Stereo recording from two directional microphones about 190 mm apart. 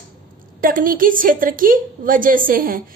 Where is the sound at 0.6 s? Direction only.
45° right (ahead or behind).